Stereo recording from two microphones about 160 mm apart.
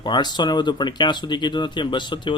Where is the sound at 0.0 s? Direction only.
25° left (ahead or behind).